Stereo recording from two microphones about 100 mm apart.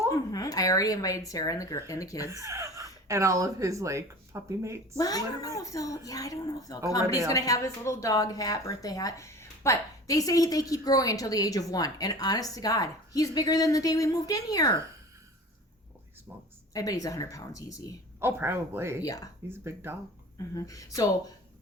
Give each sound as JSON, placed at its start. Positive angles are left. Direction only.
{"t": 0.1, "sound": "speech", "side_deg": 35}
{"t": 2.3, "sound": "speech", "side_deg": -30}
{"t": 4.9, "sound": "speech", "side_deg": 40}
{"t": 16.7, "sound": "speech", "side_deg": 35}
{"t": 18.2, "sound": "speech", "side_deg": -25}
{"t": 19.0, "sound": "speech", "side_deg": 35}
{"t": 19.6, "sound": "speech", "side_deg": -25}
{"t": 20.5, "sound": "speech", "side_deg": 35}